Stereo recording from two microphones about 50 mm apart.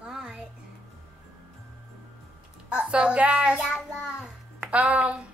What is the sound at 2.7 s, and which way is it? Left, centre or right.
A child's voice, right.